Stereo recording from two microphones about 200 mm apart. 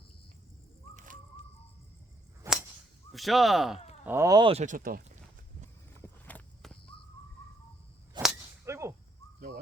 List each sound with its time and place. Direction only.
0.9 s a sound: 40° right (ahead or behind)
2.5 s whip: 15° right (ahead or behind)
3.1 s speech: centre (ahead or behind)
4.0 s speech: 15° right (ahead or behind)
4.6 s speech: 40° right (ahead or behind)
6.0 s walk: 10° left (ahead or behind)
8.1 s whip: 20° right (ahead or behind)
8.6 s a sound: 15° right (ahead or behind)